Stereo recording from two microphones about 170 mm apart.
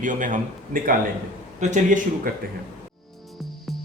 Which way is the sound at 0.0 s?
50° right (ahead or behind).